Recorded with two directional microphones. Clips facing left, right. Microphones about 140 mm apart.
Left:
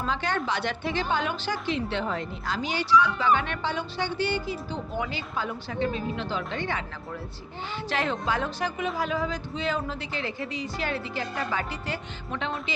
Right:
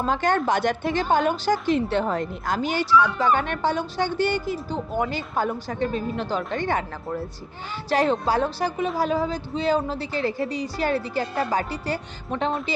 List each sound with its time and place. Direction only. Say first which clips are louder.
0.0 s a woman's voice: right 6 dB; 45° right (ahead or behind)